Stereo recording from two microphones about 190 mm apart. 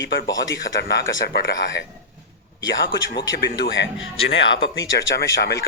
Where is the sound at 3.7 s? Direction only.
75° left (ahead or behind).